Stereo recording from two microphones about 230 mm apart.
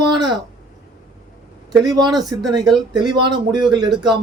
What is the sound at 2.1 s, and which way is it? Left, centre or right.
Speech, centre.